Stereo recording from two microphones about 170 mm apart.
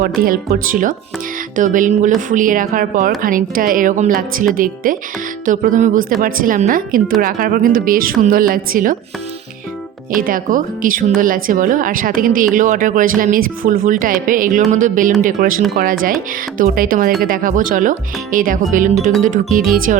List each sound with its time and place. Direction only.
0.0 s a woman's voice: 55° right (ahead or behind)
10.2 s a woman's voice: 55° right (ahead or behind)